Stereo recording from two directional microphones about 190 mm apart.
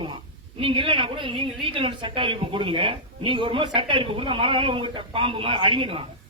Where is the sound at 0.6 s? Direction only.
25° right (ahead or behind).